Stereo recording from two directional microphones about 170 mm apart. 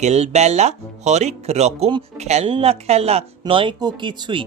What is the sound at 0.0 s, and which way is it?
Speech, 40° right (ahead or behind).